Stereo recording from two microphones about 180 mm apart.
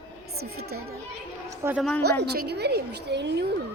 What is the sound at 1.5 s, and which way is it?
Speech, 10° right (ahead or behind).